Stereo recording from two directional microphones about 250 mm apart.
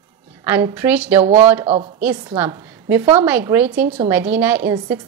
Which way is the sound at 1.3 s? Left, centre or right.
Right.